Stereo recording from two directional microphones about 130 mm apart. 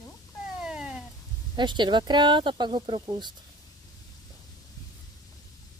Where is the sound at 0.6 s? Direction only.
5° right (ahead or behind).